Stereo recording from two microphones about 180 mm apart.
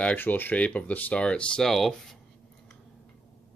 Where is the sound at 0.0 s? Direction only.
10° left (ahead or behind).